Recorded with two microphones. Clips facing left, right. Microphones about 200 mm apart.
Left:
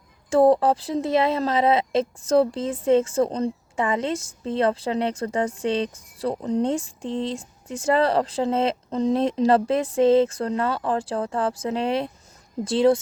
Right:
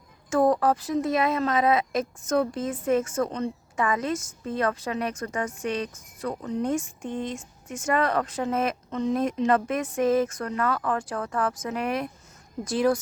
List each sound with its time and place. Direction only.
0.3 s speech: 30° left (ahead or behind)